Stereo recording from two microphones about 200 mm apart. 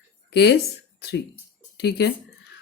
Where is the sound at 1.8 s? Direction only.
55° left (ahead or behind).